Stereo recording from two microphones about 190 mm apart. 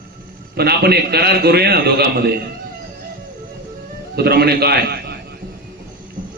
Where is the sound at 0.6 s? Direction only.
55° right (ahead or behind).